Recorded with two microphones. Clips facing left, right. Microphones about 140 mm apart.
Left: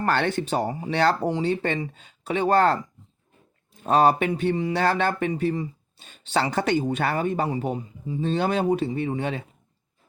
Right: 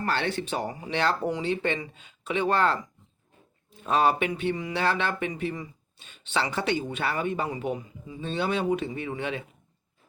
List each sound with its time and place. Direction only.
0.0 s speech: 50° left (ahead or behind)